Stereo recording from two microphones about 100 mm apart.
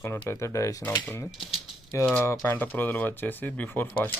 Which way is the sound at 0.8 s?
20° left (ahead or behind).